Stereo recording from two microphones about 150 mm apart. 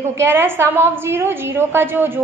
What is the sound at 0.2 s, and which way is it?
A woman's voice, 15° right (ahead or behind).